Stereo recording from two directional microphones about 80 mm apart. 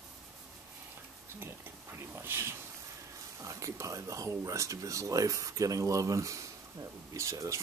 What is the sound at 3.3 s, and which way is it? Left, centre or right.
Speech, right.